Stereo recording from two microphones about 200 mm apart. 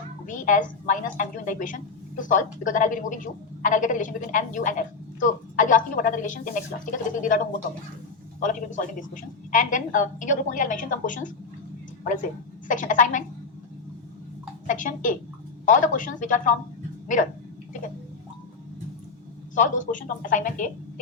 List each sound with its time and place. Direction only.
0.3 s a woman's voice: 40° left (ahead or behind)
14.7 s a woman's voice: 40° left (ahead or behind)
19.5 s a woman's voice: 40° left (ahead or behind)